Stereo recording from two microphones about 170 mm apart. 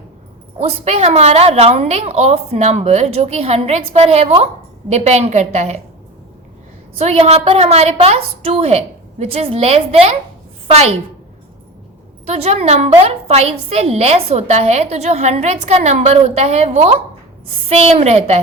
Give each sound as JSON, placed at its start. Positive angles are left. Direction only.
{"t": 0.6, "sound": "a woman's voice", "side_deg": -35}
{"t": 7.0, "sound": "a woman's voice", "side_deg": -40}
{"t": 12.2, "sound": "a woman's voice", "side_deg": -40}